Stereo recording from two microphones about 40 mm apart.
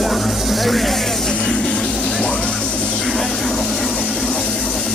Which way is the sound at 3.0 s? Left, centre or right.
Centre.